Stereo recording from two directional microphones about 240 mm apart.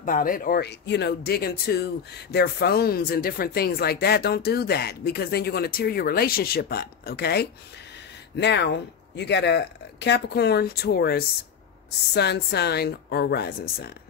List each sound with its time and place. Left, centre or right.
0.0 s speech: left